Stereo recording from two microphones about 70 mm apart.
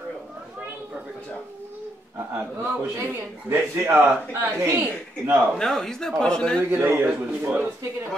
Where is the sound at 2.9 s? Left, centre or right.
Right.